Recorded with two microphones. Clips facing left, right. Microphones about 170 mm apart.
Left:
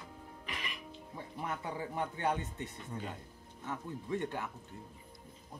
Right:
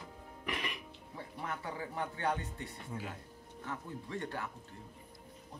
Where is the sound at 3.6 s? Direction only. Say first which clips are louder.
Left 2 dB; 20° left (ahead or behind).